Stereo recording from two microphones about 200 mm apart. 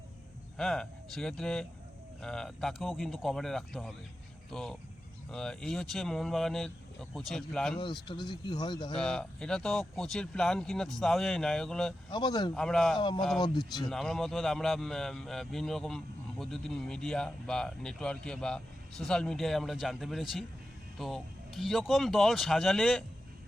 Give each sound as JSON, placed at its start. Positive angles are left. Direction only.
{"t": 0.5, "sound": "a man's voice", "side_deg": 5}
{"t": 7.8, "sound": "speech", "side_deg": 25}
{"t": 9.0, "sound": "a man's voice", "side_deg": 5}
{"t": 12.1, "sound": "speech", "side_deg": 20}
{"t": 12.5, "sound": "a man's voice", "side_deg": 5}
{"t": 13.0, "sound": "speech", "side_deg": 25}
{"t": 13.9, "sound": "a man's voice", "side_deg": 0}